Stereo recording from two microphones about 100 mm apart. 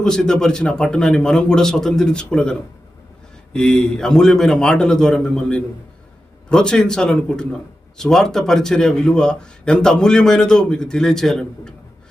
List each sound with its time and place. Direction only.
0.0 s a man's voice: 5° left (ahead or behind)